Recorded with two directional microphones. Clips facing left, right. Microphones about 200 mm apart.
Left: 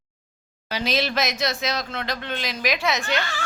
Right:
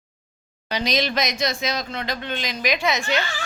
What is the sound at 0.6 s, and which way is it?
Speech, 5° left (ahead or behind).